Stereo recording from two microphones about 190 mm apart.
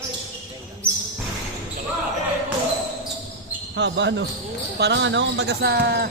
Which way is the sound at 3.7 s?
70° right (ahead or behind).